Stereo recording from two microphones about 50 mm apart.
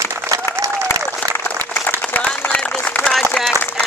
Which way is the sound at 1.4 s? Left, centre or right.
Left.